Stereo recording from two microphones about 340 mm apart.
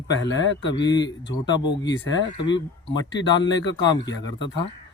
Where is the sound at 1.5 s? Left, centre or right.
Centre.